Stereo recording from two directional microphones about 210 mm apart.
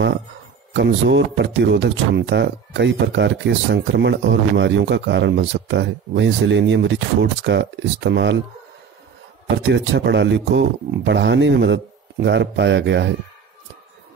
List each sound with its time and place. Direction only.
0.7 s speech: 55° right (ahead or behind)
9.6 s speech: 55° right (ahead or behind)